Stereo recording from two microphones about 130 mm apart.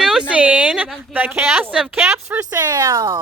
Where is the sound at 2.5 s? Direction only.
30° right (ahead or behind).